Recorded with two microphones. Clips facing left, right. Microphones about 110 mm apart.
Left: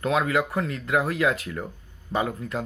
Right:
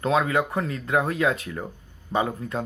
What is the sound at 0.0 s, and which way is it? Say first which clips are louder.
Speech: right 1 dB; 25° right (ahead or behind).